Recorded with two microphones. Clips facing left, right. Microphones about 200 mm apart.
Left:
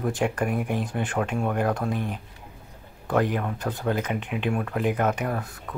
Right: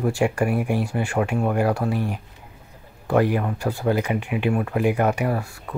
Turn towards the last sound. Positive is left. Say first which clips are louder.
# right 4 dB
turn(degrees=-10)  # may be behind; listen again after turning